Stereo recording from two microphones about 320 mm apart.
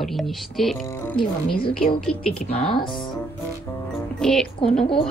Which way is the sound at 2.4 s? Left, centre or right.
Centre.